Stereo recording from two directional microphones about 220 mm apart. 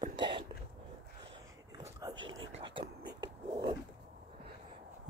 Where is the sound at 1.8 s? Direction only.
15° right (ahead or behind).